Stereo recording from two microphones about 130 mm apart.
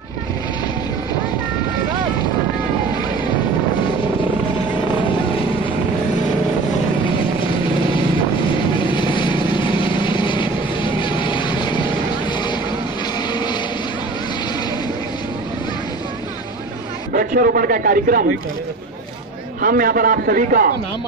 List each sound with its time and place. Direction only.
8.7 s vehicle: 40° left (ahead or behind)
13.3 s a sound: 35° left (ahead or behind)
17.2 s a man's voice: 90° right
19.6 s a man's voice: 90° right